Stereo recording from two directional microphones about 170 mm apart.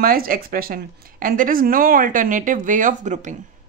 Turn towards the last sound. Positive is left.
turn(degrees=-45)  # may be behind; listen again after turning